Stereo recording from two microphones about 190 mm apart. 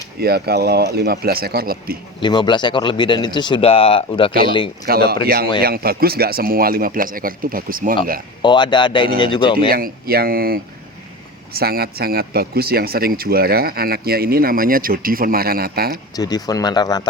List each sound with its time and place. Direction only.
0.2 s speech: 55° right (ahead or behind)
2.2 s speech: 25° left (ahead or behind)
4.9 s speech: 55° right (ahead or behind)
8.4 s speech: 25° left (ahead or behind)
9.6 s speech: 55° right (ahead or behind)
16.1 s speech: 20° left (ahead or behind)